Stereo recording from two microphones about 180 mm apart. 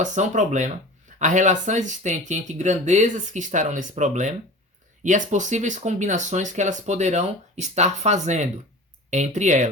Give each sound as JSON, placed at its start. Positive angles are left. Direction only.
{"t": 0.0, "sound": "speech", "side_deg": -40}